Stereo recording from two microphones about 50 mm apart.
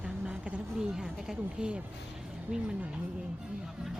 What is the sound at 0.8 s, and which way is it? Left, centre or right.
Speech, centre.